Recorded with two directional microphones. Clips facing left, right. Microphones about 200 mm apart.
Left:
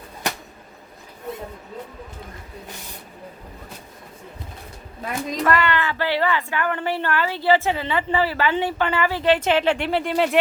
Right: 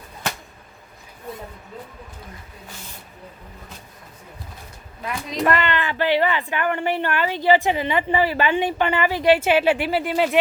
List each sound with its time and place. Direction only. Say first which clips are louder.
5.4 s a woman's voice: even; 20° right (ahead or behind); by 10.3 s 5° right (ahead or behind)